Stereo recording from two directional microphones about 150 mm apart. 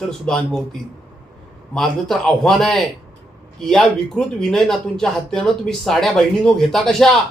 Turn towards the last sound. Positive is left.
turn(degrees=5)  # may be behind; listen again after turning